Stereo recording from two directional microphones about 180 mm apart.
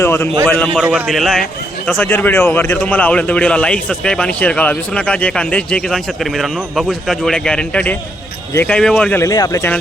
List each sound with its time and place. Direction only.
0.0 s a sound: 15° left (ahead or behind)
0.4 s a man's voice: 10° left (ahead or behind)
0.9 s speech: 5° right (ahead or behind)
1.9 s a man's voice: 10° left (ahead or behind)
9.2 s a man's voice: 20° left (ahead or behind)